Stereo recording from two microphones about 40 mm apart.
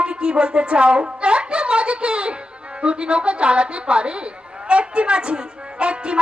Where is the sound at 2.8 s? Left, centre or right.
Right.